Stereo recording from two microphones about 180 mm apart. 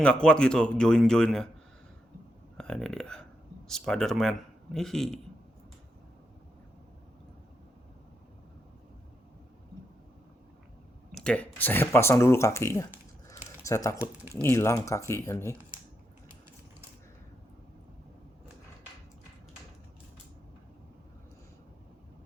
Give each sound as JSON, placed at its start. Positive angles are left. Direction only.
{"t": 0.0, "sound": "a man's voice", "side_deg": 5}
{"t": 2.6, "sound": "a man's voice", "side_deg": 5}
{"t": 11.1, "sound": "speech", "side_deg": 5}
{"t": 14.0, "sound": "speech", "side_deg": -15}
{"t": 14.4, "sound": "speech", "side_deg": 15}